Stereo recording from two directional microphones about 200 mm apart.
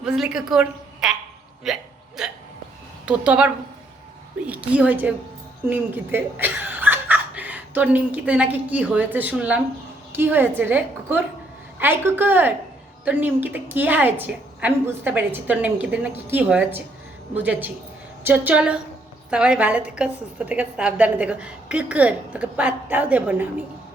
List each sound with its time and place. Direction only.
0.0 s a woman's voice: 5° right (ahead or behind)
1.6 s hiccup: centre (ahead or behind)
3.1 s a woman's voice: 5° right (ahead or behind)